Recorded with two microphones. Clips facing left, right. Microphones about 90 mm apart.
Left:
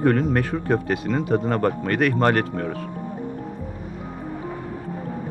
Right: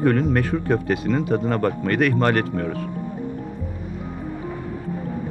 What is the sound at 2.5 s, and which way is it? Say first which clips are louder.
Music: right 2 dB; 40° left (ahead or behind).